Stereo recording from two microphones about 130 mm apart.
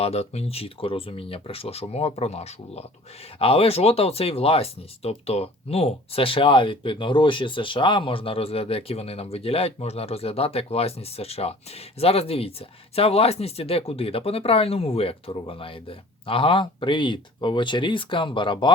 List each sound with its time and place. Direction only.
0.0 s speech: 55° left (ahead or behind)